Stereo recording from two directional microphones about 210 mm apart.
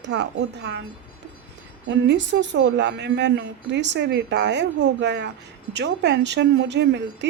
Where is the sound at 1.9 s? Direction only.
55° right (ahead or behind).